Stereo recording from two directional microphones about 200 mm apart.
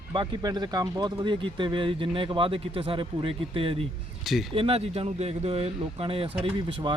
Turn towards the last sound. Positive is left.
turn(degrees=-25)  # may be behind; listen again after turning